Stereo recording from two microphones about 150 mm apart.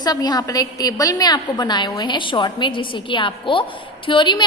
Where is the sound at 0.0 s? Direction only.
25° left (ahead or behind).